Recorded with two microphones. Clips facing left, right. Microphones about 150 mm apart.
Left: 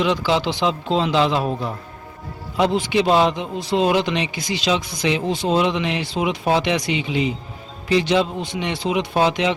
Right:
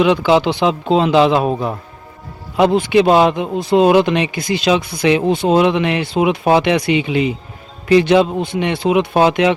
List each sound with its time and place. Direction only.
0.0 s a man's voice: 60° right (ahead or behind)